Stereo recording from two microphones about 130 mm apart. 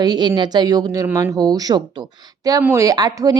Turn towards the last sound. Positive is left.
turn(degrees=-30)  # may be behind; listen again after turning